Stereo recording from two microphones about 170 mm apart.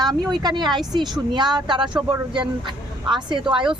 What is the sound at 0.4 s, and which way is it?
Speech, 25° right (ahead or behind).